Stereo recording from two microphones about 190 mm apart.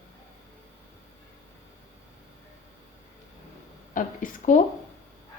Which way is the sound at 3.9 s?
45° left (ahead or behind).